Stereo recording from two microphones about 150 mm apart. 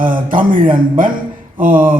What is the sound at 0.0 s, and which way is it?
A man's voice, 65° right (ahead or behind).